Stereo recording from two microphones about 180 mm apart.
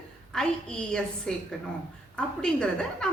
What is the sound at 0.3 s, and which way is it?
A woman's voice, 5° left (ahead or behind).